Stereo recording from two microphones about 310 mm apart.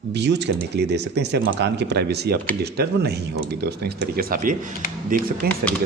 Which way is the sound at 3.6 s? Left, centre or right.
Right.